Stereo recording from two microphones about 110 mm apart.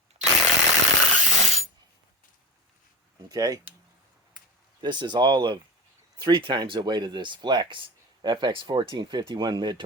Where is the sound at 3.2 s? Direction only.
35° right (ahead or behind).